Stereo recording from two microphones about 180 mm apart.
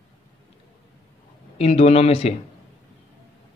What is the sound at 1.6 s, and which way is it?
Speech, 35° left (ahead or behind).